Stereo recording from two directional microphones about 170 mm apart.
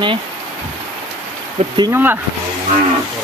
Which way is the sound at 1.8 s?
15° right (ahead or behind).